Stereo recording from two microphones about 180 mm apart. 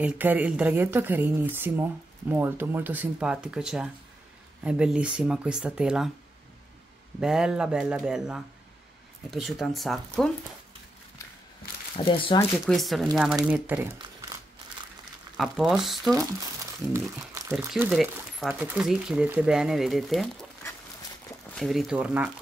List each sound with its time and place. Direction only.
0.0 s speech: 10° right (ahead or behind)
7.2 s speech: 5° right (ahead or behind)
11.6 s a sound: 55° left (ahead or behind)
12.5 s speech: centre (ahead or behind)
15.3 s speech: centre (ahead or behind)
17.3 s speech: 15° right (ahead or behind)
17.8 s speech: centre (ahead or behind)
21.5 s speech: centre (ahead or behind)